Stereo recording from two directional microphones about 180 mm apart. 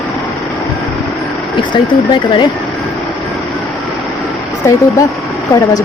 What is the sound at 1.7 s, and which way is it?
Speech, 25° left (ahead or behind).